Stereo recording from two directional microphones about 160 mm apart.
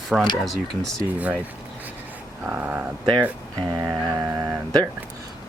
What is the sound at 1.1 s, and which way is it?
Mantra, 10° right (ahead or behind).